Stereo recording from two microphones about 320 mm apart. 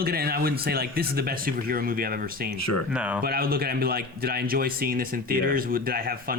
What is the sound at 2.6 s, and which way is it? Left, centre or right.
Speech, left.